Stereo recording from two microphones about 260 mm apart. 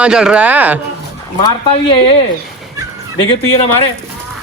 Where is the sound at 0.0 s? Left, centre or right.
Centre.